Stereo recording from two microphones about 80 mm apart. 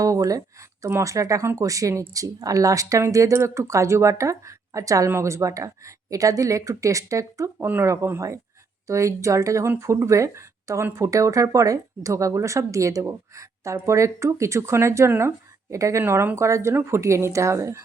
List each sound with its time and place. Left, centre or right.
0.0 s speech: right